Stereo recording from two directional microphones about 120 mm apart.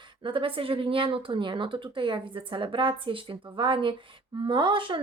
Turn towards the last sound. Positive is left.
turn(degrees=-45)  # may be behind; listen again after turning